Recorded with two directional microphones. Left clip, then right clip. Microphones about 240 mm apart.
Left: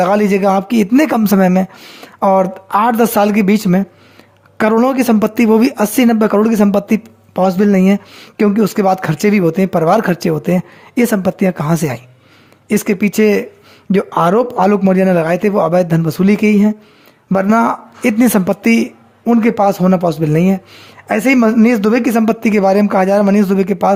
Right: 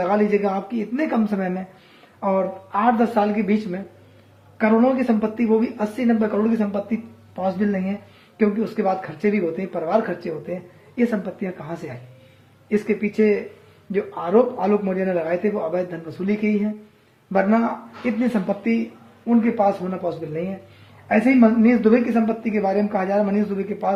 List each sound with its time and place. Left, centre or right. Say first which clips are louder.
0.0 s speech: left 8 dB; left